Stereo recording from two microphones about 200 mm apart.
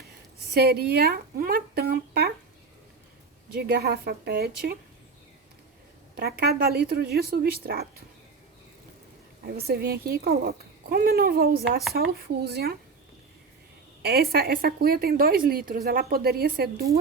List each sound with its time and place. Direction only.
0.5 s a woman's voice: 50° right (ahead or behind)
3.5 s a woman's voice: 50° right (ahead or behind)
6.1 s a woman's voice: 50° right (ahead or behind)
9.5 s a woman's voice: 50° right (ahead or behind)
14.0 s a woman's voice: 50° right (ahead or behind)